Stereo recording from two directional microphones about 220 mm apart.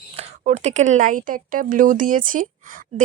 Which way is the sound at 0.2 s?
30° right (ahead or behind).